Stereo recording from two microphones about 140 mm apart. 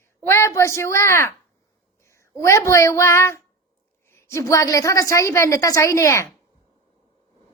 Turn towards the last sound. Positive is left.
turn(degrees=20)  # may be behind; listen again after turning